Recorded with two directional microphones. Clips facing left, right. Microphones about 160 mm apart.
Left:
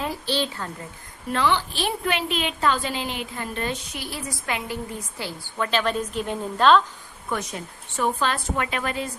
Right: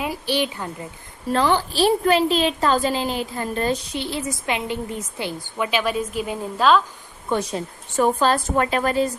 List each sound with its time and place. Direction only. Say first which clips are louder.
0.0 s a woman's voice: right 3 dB; 15° right (ahead or behind)
1.3 s a woman's voice: right 3 dB; 40° right (ahead or behind)
4.0 s a woman's voice: right 6 dB; 25° right (ahead or behind); by 6.8 s 5° right (ahead or behind)
7.3 s a woman's voice: right 6 dB; 30° right (ahead or behind)
7.9 s a woman's voice: right 6 dB; 40° right (ahead or behind)